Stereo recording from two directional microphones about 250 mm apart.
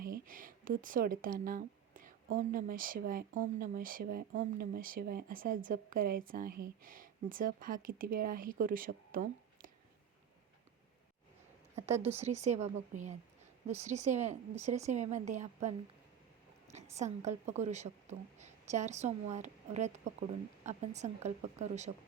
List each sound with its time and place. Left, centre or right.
0.0 s speech: right
11.9 s speech: centre
12.1 s a woman's voice: right
17.0 s a woman's voice: right